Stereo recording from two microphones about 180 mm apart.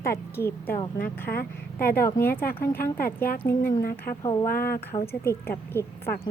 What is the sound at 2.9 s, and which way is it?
Speech, 55° left (ahead or behind).